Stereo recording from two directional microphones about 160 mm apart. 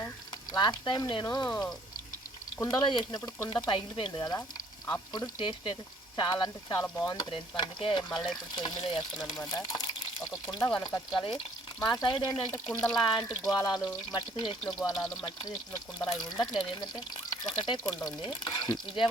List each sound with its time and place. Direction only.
0.5 s speech: 25° left (ahead or behind)
5.4 s stir: 30° left (ahead or behind)
6.1 s speech: 30° left (ahead or behind)
7.3 s stir: 35° left (ahead or behind)
8.5 s speech: 25° left (ahead or behind)
12.6 s speech: 5° left (ahead or behind)
13.1 s speech: 25° left (ahead or behind)
14.3 s stir: 35° left (ahead or behind)
15.2 s speech: 30° left (ahead or behind)